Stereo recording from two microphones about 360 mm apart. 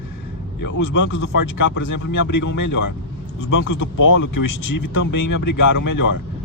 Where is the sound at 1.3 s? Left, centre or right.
Left.